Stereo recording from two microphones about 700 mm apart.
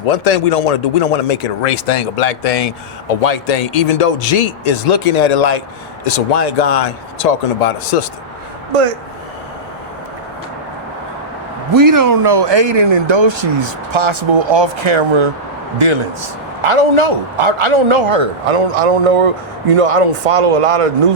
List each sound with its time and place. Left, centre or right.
0.0 s speech: left
11.7 s a man's voice: right